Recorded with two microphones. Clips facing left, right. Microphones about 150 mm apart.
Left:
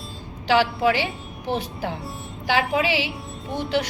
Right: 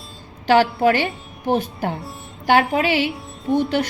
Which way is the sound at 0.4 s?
50° right (ahead or behind).